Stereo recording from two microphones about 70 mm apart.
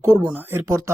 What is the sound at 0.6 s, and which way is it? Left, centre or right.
Speech, right.